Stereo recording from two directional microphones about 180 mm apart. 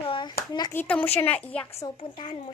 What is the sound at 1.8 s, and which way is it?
Speech, 25° left (ahead or behind).